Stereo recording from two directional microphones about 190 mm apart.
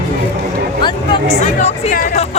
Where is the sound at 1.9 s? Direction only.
45° left (ahead or behind).